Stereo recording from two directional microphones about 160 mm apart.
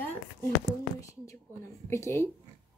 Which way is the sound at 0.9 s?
20° left (ahead or behind).